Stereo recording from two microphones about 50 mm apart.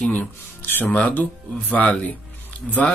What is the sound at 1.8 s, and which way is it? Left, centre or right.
Speech, centre.